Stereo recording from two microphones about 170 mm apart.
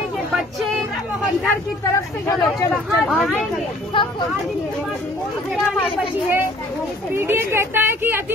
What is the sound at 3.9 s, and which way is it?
Speech, 30° left (ahead or behind).